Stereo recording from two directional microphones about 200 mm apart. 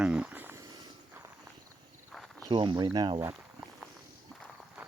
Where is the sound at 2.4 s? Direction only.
25° right (ahead or behind).